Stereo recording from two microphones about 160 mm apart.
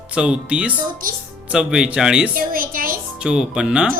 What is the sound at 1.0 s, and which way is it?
Speech, 65° right (ahead or behind).